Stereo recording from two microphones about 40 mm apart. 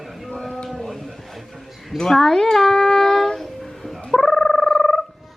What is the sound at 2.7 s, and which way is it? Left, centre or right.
Singing, centre.